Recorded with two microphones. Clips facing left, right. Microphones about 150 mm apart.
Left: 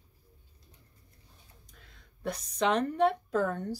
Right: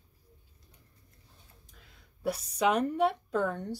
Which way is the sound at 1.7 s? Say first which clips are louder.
Left 1 dB; 5° right (ahead or behind).